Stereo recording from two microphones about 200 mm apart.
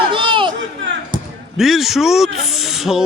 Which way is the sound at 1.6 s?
Centre (ahead or behind).